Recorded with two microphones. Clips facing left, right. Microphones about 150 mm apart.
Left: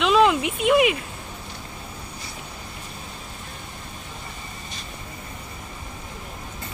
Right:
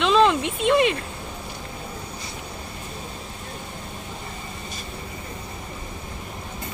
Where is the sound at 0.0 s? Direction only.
5° left (ahead or behind).